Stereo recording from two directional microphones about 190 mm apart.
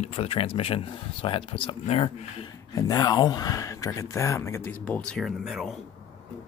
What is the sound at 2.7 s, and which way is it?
Speech, 20° left (ahead or behind).